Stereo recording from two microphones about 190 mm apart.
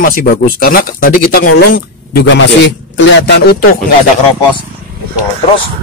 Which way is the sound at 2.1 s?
70° left (ahead or behind).